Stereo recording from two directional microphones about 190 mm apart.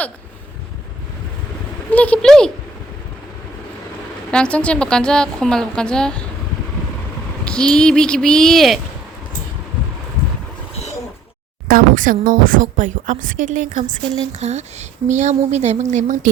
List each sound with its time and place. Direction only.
1.9 s a woman's voice: 5° left (ahead or behind)
4.3 s a woman's voice: 5° left (ahead or behind)
7.4 s a woman's voice: 5° left (ahead or behind)
11.7 s a woman's voice: 45° right (ahead or behind)